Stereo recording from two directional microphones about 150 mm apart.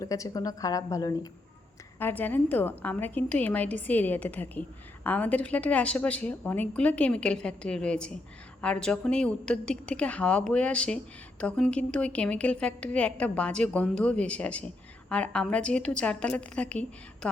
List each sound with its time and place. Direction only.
0.0 s a woman's voice: 20° left (ahead or behind)
2.0 s a woman's voice: 15° left (ahead or behind)